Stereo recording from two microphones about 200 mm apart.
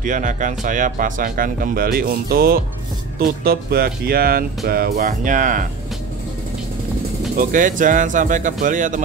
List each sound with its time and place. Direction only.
0.0 s speech: 40° right (ahead or behind)
7.3 s speech: 40° right (ahead or behind)